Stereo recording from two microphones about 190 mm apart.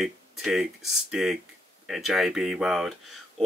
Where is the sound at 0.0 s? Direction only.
Centre (ahead or behind).